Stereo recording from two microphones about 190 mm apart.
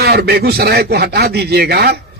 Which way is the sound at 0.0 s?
55° right (ahead or behind).